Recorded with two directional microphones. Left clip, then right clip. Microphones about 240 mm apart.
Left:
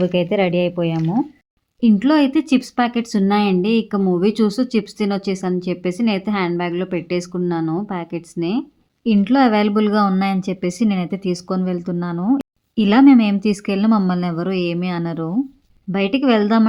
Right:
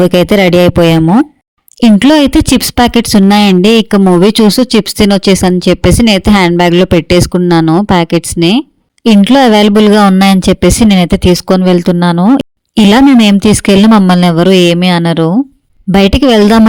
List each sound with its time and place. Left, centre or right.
0.1 s speech: right
1.8 s speech: right